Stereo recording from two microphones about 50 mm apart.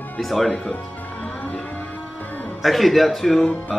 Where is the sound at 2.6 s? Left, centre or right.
Centre.